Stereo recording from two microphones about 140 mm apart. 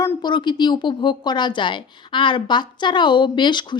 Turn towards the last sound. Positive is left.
turn(degrees=35)  # may be behind; listen again after turning